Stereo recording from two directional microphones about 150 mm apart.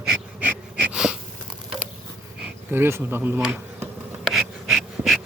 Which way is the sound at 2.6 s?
15° right (ahead or behind).